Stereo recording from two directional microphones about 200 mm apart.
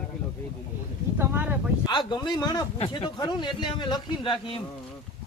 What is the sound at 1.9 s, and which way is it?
Speech, 20° left (ahead or behind).